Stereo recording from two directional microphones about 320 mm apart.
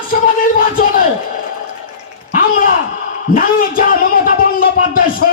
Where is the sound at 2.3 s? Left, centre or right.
Left.